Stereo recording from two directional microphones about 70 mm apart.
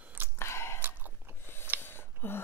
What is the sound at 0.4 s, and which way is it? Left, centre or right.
Biting, left.